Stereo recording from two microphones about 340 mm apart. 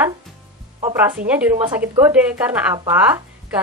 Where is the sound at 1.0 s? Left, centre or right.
Centre.